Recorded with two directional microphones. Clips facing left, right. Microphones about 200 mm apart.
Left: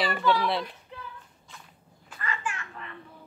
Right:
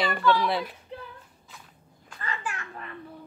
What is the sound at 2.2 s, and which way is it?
Children playing, 35° right (ahead or behind).